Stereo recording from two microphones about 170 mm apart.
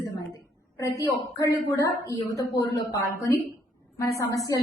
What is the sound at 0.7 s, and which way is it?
A woman's voice, 20° left (ahead or behind).